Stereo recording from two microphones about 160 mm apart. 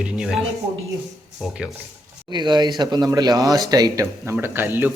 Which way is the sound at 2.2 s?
25° right (ahead or behind).